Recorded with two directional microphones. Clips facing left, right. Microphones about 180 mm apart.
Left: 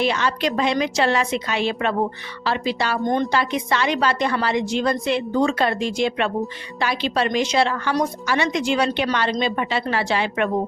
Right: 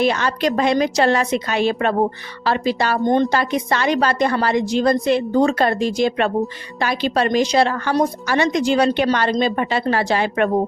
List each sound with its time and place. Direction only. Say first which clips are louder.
0.0 s a woman's voice: right 3 dB; 45° right (ahead or behind)